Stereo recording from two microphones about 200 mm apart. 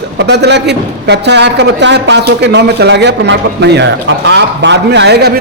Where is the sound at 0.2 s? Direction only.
55° right (ahead or behind).